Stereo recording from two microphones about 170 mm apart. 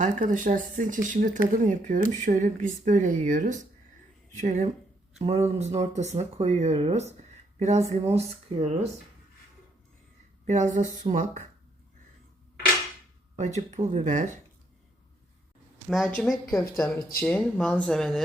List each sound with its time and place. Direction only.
0.0 s speech: 50° right (ahead or behind)
10.4 s speech: 45° right (ahead or behind)
13.6 s speech: 40° right (ahead or behind)
15.9 s speech: 5° left (ahead or behind)